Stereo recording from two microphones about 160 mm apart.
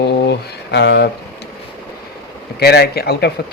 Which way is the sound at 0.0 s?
90° left.